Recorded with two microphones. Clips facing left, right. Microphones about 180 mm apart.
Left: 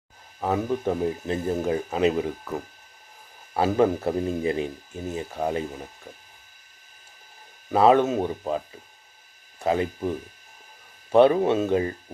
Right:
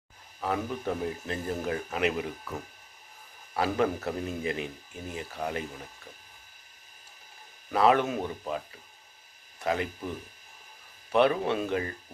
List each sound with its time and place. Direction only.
0.3 s speech: 25° left (ahead or behind)
3.5 s speech: 25° left (ahead or behind)
7.7 s speech: 25° left (ahead or behind)
11.1 s speech: 30° left (ahead or behind)